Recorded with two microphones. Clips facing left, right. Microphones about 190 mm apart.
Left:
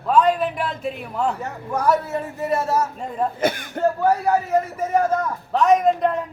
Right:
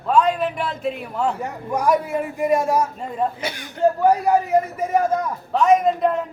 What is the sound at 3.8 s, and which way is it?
A man's voice, 15° right (ahead or behind).